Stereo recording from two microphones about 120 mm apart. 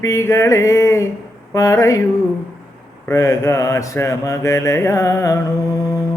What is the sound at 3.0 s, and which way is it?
A man's voice, 25° left (ahead or behind).